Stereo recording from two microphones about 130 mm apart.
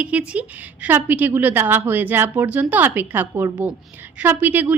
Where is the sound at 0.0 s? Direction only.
10° right (ahead or behind).